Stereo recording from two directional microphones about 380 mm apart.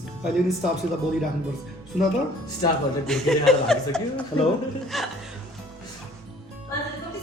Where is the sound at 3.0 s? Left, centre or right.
Centre.